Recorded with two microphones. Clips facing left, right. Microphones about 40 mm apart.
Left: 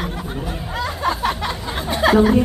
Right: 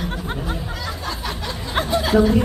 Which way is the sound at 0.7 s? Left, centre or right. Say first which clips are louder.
Left 6 dB; left.